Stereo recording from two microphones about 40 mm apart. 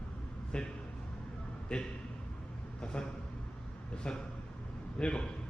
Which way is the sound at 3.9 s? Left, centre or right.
Left.